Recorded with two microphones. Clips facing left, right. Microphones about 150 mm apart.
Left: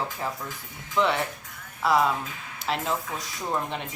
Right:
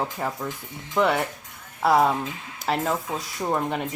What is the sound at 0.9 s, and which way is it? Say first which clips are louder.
Speech: right 3 dB; 45° right (ahead or behind).